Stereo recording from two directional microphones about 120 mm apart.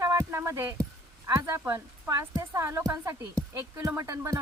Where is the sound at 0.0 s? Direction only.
30° right (ahead or behind).